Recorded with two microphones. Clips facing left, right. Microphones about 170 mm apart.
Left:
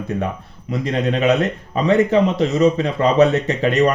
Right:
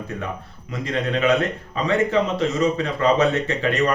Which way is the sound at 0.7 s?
35° left (ahead or behind).